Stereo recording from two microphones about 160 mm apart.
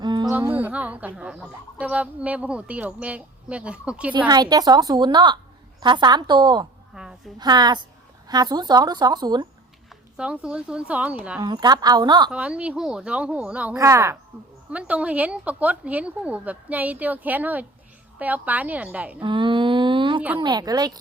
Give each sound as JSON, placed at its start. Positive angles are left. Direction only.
{"t": 0.0, "sound": "music", "side_deg": -25}
{"t": 0.3, "sound": "speech", "side_deg": -15}
{"t": 4.3, "sound": "a woman's voice", "side_deg": -25}
{"t": 6.9, "sound": "a sound", "side_deg": -5}
{"t": 7.3, "sound": "a woman's voice", "side_deg": -25}
{"t": 10.2, "sound": "speech", "side_deg": -5}
{"t": 11.4, "sound": "a woman's voice", "side_deg": -25}
{"t": 12.3, "sound": "speech", "side_deg": -5}
{"t": 13.7, "sound": "a woman's voice", "side_deg": -20}
{"t": 14.7, "sound": "speech", "side_deg": -10}
{"t": 19.2, "sound": "a sound", "side_deg": -30}
{"t": 20.4, "sound": "a woman's voice", "side_deg": -25}